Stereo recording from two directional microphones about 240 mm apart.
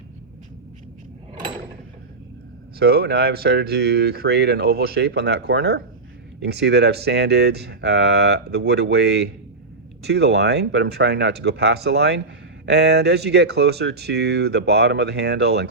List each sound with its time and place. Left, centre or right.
2.7 s speech: right